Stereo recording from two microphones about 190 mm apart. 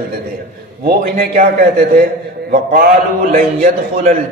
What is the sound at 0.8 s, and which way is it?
A man's voice, 50° right (ahead or behind).